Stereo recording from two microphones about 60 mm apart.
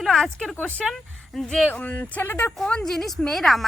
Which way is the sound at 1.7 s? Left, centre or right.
Left.